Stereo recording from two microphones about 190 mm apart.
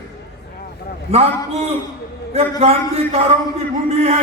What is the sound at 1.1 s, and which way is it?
A man's voice, 30° right (ahead or behind).